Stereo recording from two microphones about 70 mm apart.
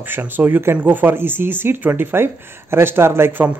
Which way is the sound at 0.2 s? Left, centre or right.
Right.